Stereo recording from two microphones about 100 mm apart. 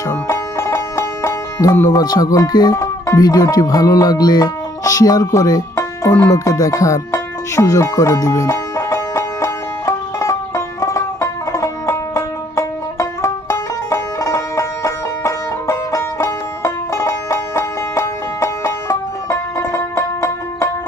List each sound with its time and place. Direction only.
0.1 s music: 30° left (ahead or behind)
2.7 s music: 30° left (ahead or behind)